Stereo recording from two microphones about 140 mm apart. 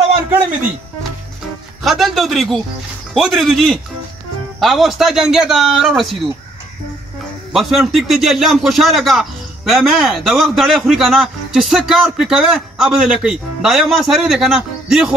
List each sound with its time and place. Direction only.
1.8 s a man's voice: centre (ahead or behind)
7.5 s a man's voice: centre (ahead or behind)